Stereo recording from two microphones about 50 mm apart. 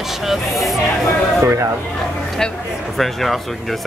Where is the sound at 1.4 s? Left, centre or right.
Right.